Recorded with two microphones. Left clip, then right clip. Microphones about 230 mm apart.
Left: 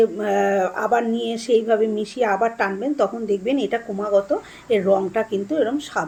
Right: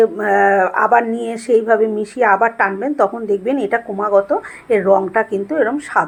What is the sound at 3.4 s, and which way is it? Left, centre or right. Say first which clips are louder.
Speech: right 3 dB; right.